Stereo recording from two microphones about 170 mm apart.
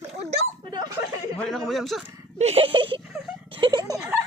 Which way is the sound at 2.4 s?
35° right (ahead or behind).